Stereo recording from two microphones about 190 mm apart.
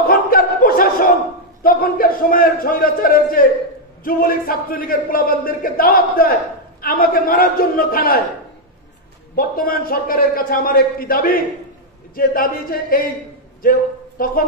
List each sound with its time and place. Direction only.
0.0 s a sound: 50° left (ahead or behind)
1.6 s a man's voice: 50° left (ahead or behind)
9.3 s a man's voice: 50° left (ahead or behind)